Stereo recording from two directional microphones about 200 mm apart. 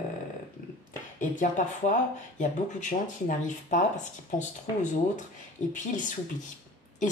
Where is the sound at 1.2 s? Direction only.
40° left (ahead or behind).